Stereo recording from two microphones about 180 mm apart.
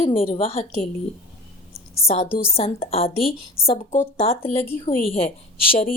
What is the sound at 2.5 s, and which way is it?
Speech, 35° left (ahead or behind).